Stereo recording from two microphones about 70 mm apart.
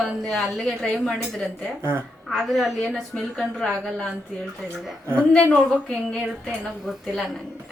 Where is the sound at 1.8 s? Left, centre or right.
Right.